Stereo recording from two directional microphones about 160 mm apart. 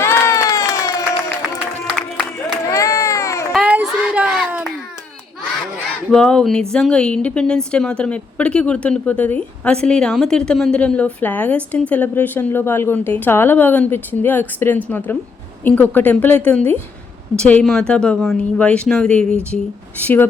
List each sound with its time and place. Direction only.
0.0 s crowd: 15° left (ahead or behind)
2.6 s baby cry: 20° left (ahead or behind)
3.5 s children playing: 10° right (ahead or behind)
6.1 s a woman's voice: 5° left (ahead or behind)